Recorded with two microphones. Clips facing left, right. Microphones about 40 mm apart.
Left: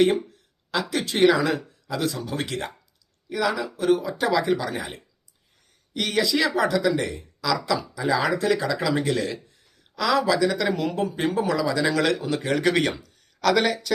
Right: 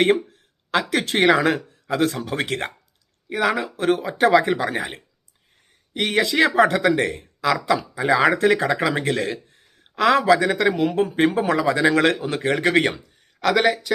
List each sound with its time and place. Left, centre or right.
0.7 s speech: right
5.9 s speech: right
10.9 s speech: right
13.5 s speech: centre